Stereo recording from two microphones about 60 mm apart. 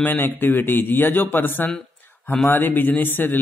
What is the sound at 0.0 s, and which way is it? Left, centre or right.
A man's voice, left.